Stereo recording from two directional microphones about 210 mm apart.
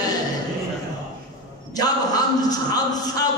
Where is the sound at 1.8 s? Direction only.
20° left (ahead or behind).